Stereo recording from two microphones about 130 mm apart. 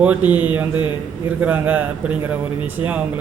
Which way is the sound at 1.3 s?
10° right (ahead or behind).